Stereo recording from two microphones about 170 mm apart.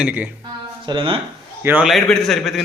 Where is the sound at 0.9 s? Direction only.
30° right (ahead or behind).